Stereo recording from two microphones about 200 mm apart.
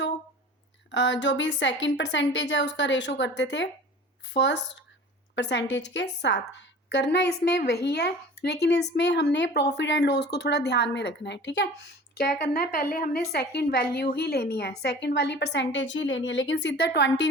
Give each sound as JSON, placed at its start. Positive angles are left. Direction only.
{"t": 0.9, "sound": "a woman's voice", "side_deg": 65}